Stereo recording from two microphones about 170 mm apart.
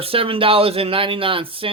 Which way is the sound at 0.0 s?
35° right (ahead or behind).